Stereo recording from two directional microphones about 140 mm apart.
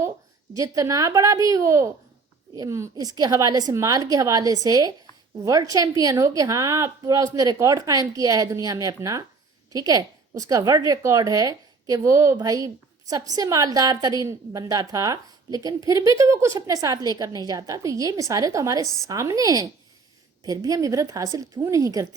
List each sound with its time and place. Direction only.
0.5 s a woman's voice: 25° right (ahead or behind)